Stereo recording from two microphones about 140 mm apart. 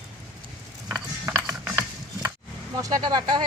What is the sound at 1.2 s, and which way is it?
Music, 15° right (ahead or behind).